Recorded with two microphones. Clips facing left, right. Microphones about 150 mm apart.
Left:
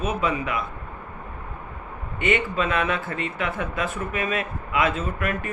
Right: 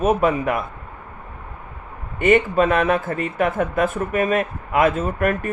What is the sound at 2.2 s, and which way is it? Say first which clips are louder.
Speech: right 8 dB; 45° right (ahead or behind).